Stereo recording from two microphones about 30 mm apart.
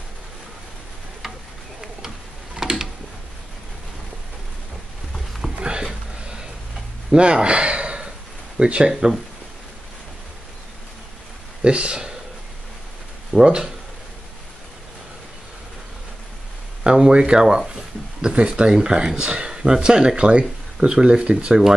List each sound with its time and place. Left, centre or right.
1.8 s tick-tock: centre
5.6 s a sound: right
7.1 s speech: right
7.4 s gasp: right
8.5 s speech: right
11.6 s speech: right
13.4 s speech: right
16.8 s speech: right